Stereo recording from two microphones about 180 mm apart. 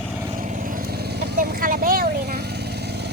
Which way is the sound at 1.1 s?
50° right (ahead or behind).